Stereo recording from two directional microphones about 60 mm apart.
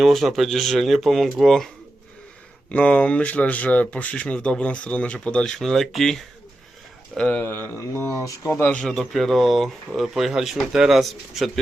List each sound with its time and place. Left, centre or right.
0.0 s speech: centre
2.7 s speech: left
5.5 s speech: centre
7.4 s speech: left
8.0 s speech: left
8.8 s speech: centre